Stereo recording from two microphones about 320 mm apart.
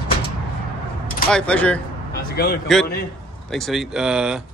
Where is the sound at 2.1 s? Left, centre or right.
Left.